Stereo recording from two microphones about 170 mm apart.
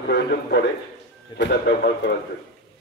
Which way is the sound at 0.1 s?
70° left (ahead or behind).